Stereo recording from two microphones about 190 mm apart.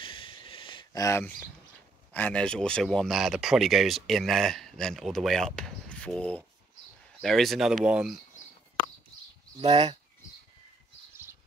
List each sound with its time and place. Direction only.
0.0 s a sound: 25° left (ahead or behind)
2.1 s speech: 5° left (ahead or behind)
9.6 s speech: 25° right (ahead or behind)